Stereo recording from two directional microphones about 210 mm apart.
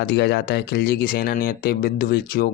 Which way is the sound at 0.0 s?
50° left (ahead or behind).